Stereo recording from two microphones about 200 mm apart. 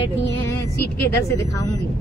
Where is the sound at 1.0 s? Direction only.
10° left (ahead or behind).